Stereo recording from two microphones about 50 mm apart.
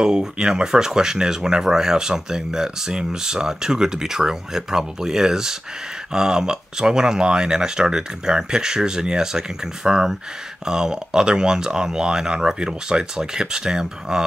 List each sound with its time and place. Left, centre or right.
0.0 s speech: centre